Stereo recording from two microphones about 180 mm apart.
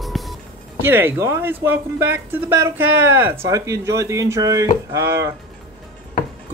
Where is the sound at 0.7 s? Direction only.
10° right (ahead or behind).